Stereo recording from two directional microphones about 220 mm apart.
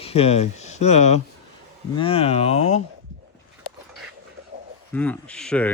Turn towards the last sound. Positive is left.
turn(degrees=5)  # may be behind; listen again after turning